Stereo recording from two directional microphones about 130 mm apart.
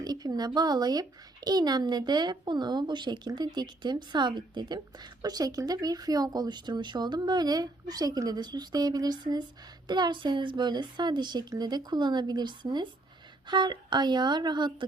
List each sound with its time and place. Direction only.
0.0 s a child's voice: 30° right (ahead or behind)